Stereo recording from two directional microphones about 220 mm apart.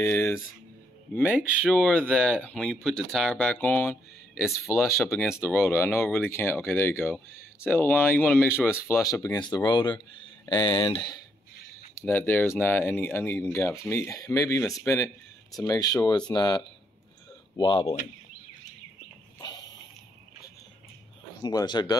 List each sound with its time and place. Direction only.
0.0 s speech: 10° left (ahead or behind)
1.2 s speech: 5° right (ahead or behind)
5.7 s speech: 10° left (ahead or behind)
8.5 s speech: 5° right (ahead or behind)
9.0 s speech: 15° left (ahead or behind)
12.0 s speech: 10° left (ahead or behind)
21.4 s speech: 20° left (ahead or behind)